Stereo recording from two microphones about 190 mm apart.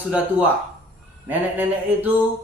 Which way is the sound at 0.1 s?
10° right (ahead or behind).